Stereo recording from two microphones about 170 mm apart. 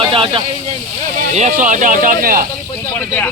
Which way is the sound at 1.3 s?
45° right (ahead or behind).